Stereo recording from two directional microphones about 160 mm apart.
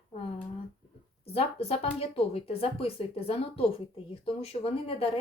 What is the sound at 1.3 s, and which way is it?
Speech, 40° left (ahead or behind).